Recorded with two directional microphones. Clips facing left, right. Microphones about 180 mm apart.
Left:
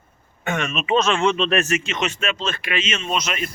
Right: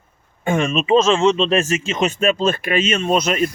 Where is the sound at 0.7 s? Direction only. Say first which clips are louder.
Right 4 dB; 30° right (ahead or behind).